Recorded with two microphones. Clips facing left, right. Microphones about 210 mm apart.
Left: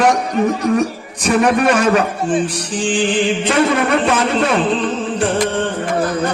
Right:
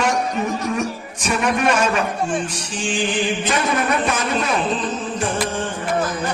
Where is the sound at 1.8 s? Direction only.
35° left (ahead or behind).